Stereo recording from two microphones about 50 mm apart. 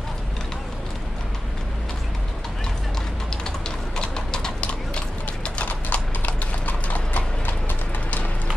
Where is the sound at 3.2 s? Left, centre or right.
Centre.